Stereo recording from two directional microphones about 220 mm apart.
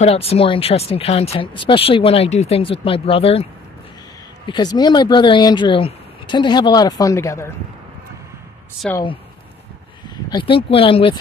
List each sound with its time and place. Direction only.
0.0 s speech: 30° left (ahead or behind)
4.5 s speech: 20° left (ahead or behind)
8.9 s speech: 20° left (ahead or behind)
10.3 s speech: 25° left (ahead or behind)